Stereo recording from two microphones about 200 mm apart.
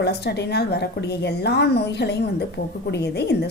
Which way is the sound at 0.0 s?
55° left (ahead or behind).